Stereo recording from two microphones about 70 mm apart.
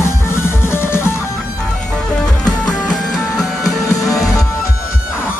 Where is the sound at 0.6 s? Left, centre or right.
Left.